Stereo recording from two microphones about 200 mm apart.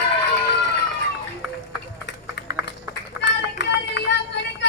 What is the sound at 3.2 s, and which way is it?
Run, 60° left (ahead or behind).